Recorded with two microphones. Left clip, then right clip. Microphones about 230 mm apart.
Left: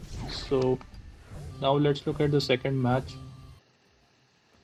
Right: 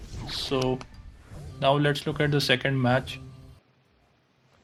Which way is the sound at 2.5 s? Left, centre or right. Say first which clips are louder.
Right 3 dB; right.